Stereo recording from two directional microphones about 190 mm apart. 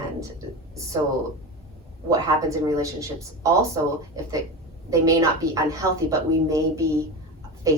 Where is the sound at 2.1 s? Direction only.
15° right (ahead or behind).